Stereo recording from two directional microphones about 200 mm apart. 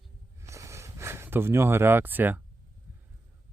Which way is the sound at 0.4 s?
15° right (ahead or behind).